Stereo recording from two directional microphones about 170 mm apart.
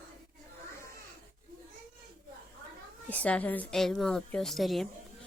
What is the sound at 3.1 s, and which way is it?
A woman's voice, 10° left (ahead or behind).